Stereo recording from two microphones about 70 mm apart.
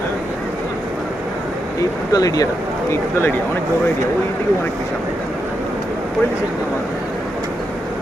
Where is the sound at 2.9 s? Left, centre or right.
Left.